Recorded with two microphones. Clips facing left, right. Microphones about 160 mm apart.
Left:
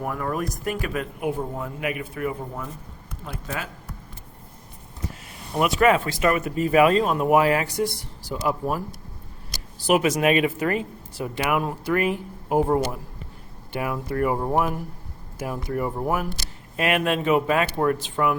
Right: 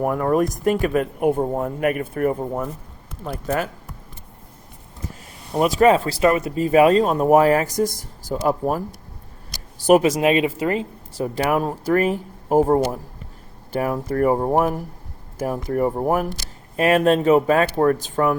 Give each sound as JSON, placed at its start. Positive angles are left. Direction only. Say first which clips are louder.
{"t": 0.0, "sound": "speech", "louder": "right 8 dB", "side_deg": -45}
{"t": 5.5, "sound": "speech", "louder": "right 4 dB", "side_deg": -35}
{"t": 10.0, "sound": "speech", "louder": "right 2 dB", "side_deg": -30}
{"t": 11.2, "sound": "speech", "louder": "right 4 dB", "side_deg": -35}